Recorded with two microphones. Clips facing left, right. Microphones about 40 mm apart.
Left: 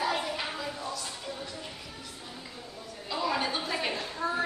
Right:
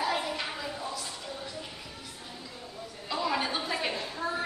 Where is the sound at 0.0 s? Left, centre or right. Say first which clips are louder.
Even; centre.